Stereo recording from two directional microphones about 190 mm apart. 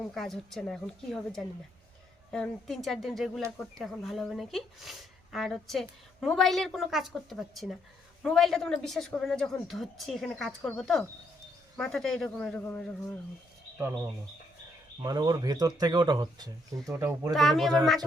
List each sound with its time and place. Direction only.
0.1 s speech: centre (ahead or behind)
13.7 s speech: 10° right (ahead or behind)
17.3 s speech: centre (ahead or behind)